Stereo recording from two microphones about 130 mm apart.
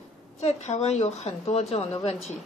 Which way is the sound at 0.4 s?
60° left (ahead or behind).